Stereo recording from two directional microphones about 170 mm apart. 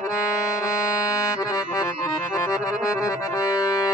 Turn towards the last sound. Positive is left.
turn(degrees=20)  # may be behind; listen again after turning